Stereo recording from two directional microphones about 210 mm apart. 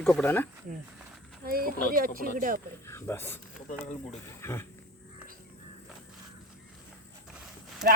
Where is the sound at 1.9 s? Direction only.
45° right (ahead or behind).